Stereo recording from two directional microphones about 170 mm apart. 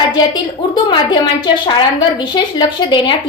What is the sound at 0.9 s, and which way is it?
A woman's voice, 25° left (ahead or behind).